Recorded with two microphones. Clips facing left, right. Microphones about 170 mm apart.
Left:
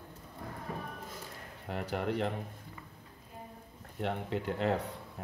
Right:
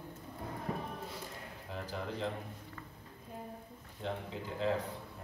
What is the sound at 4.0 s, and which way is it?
Speech, 70° left (ahead or behind).